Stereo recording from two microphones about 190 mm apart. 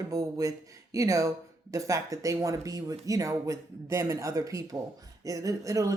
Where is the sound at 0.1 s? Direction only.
20° right (ahead or behind).